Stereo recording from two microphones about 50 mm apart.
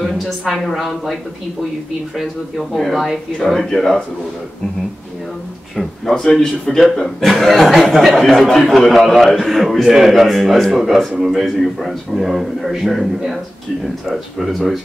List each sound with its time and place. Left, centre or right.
0.0 s speech: centre
2.7 s speech: centre
6.3 s a man's voice: centre